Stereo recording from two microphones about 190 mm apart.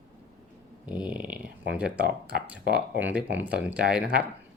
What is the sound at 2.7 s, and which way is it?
Speech, 60° right (ahead or behind).